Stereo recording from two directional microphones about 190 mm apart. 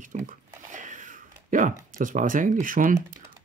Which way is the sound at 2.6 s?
45° right (ahead or behind).